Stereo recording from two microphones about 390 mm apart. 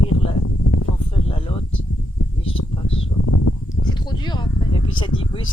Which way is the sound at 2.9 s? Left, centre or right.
Left.